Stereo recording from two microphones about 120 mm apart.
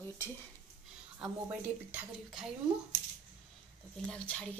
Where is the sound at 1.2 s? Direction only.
15° right (ahead or behind).